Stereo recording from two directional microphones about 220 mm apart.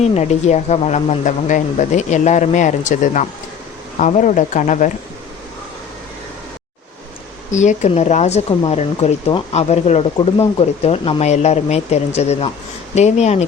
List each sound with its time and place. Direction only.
0.0 s speech: 30° left (ahead or behind)
7.5 s speech: 35° left (ahead or behind)